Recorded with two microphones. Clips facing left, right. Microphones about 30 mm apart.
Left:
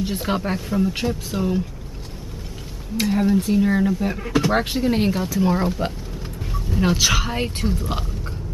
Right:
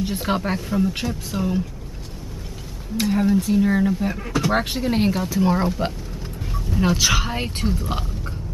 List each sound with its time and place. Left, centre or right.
0.0 s speech: centre
3.0 s speech: centre
3.6 s speech: centre